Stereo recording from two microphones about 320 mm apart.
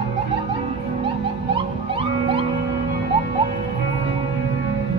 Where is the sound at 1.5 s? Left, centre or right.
Centre.